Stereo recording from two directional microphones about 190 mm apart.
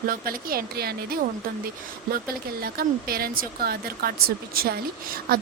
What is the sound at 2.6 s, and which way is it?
Speech, 50° right (ahead or behind).